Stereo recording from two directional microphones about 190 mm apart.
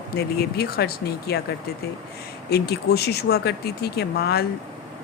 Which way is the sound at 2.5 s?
55° left (ahead or behind).